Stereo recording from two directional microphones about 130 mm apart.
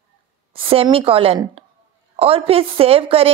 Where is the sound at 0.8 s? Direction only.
45° right (ahead or behind).